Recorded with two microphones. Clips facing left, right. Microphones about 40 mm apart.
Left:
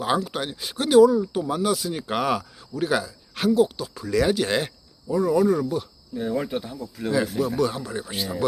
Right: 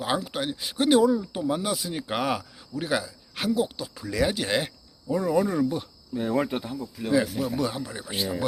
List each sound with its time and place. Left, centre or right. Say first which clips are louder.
0.0 s speech: left 3 dB; centre
0.9 s speech: left 5 dB; centre
5.0 s speech: left 4 dB; centre
6.2 s speech: even; right
7.0 s speech: left 1 dB; centre